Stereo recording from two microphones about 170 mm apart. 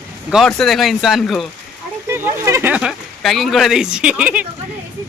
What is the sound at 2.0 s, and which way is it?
Speech, 15° right (ahead or behind).